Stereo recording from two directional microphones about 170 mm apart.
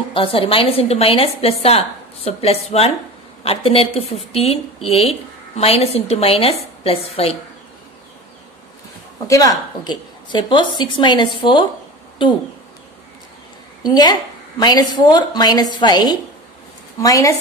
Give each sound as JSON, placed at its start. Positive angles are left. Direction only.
{"t": 0.1, "sound": "a woman's voice", "side_deg": 30}
{"t": 9.3, "sound": "a woman's voice", "side_deg": 20}
{"t": 13.8, "sound": "a woman's voice", "side_deg": 25}